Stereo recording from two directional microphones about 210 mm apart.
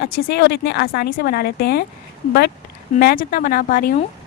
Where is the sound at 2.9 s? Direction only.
40° left (ahead or behind).